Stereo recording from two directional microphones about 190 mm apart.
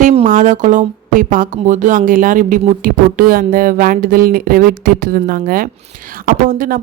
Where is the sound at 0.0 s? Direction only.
30° right (ahead or behind).